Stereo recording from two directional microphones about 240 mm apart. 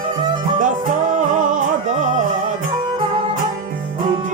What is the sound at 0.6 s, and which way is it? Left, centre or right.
Music, right.